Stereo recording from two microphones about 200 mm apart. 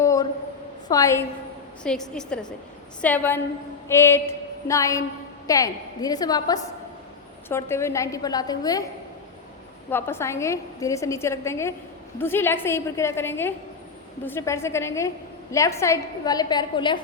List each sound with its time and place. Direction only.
0.0 s a sound: 15° left (ahead or behind)
0.9 s a woman's voice: 15° left (ahead or behind)
1.8 s a woman's voice: 5° left (ahead or behind); by 8.8 s 20° left (ahead or behind)
9.9 s a woman's voice: 10° left (ahead or behind)